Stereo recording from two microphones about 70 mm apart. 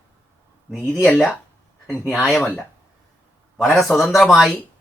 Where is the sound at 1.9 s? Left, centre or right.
Left.